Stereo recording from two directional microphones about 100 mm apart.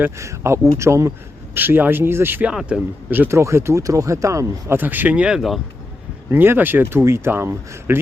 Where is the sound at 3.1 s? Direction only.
20° right (ahead or behind).